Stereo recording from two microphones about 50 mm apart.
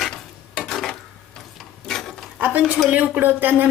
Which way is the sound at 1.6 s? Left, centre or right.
Centre.